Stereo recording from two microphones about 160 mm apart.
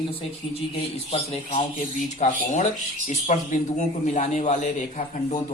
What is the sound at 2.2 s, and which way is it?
Speech, 50° left (ahead or behind).